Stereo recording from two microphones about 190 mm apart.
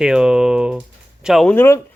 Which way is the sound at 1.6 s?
15° left (ahead or behind).